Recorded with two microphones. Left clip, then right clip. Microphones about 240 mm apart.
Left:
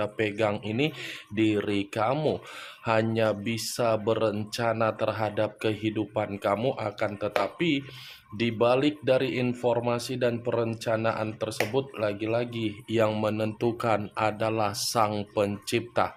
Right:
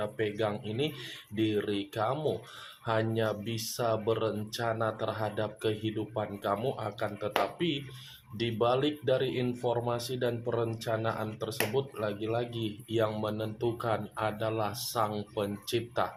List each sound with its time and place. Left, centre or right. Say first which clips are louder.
0.0 s speech: left 5 dB; left